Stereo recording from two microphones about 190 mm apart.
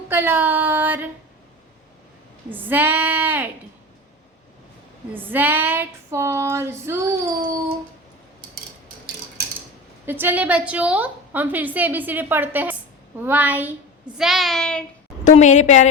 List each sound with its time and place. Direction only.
0.1 s a woman's voice: 10° right (ahead or behind)
2.5 s a woman's voice: 10° right (ahead or behind)
5.1 s a woman's voice: 10° right (ahead or behind)
10.1 s a woman's voice: 10° right (ahead or behind)
15.3 s a woman's voice: 40° left (ahead or behind)